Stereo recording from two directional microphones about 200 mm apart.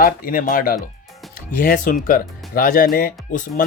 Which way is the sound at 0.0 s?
45° left (ahead or behind).